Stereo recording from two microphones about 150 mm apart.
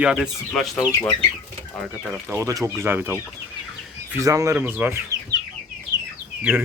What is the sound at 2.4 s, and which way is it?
Speech, 20° right (ahead or behind).